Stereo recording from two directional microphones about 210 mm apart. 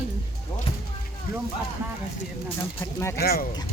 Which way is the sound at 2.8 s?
15° left (ahead or behind).